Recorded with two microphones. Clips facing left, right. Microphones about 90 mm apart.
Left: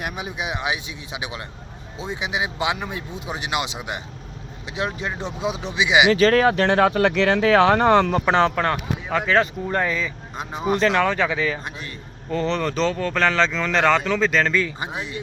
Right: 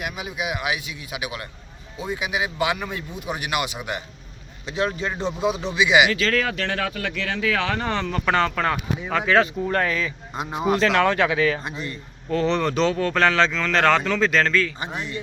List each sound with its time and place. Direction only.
0.0 s speech: 30° left (ahead or behind)
6.1 s speech: 35° left (ahead or behind)
6.9 s speech: 50° left (ahead or behind)
7.4 s speech: 35° left (ahead or behind)
8.2 s speech: 20° left (ahead or behind)
8.6 s speech: centre (ahead or behind)
11.4 s speech: centre (ahead or behind)